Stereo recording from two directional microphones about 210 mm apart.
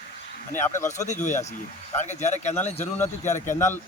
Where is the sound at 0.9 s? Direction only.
35° left (ahead or behind).